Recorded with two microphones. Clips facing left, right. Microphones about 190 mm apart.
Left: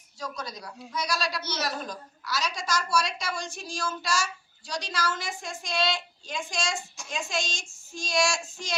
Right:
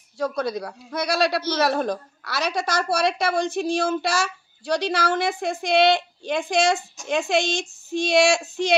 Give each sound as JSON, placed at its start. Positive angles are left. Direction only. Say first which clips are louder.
{"t": 0.2, "sound": "speech", "louder": "right 12 dB", "side_deg": -60}